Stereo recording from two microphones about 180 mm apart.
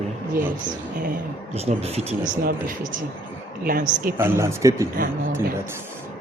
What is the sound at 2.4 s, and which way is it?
Speech, 50° right (ahead or behind).